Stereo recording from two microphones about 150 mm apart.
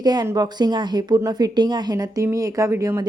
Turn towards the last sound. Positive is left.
turn(degrees=-20)  # may be behind; listen again after turning